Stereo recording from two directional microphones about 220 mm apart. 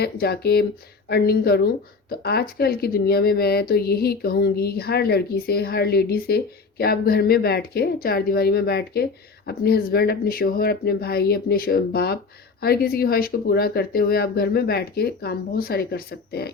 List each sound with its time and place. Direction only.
0.0 s speech: 45° left (ahead or behind)